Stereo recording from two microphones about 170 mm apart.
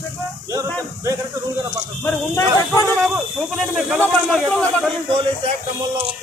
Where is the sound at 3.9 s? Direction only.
5° left (ahead or behind).